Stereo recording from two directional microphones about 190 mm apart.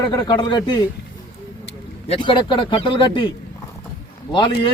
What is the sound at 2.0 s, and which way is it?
A man's voice, 25° left (ahead or behind).